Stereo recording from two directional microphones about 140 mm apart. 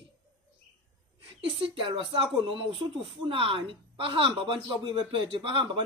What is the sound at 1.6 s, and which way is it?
A man's voice, 40° right (ahead or behind).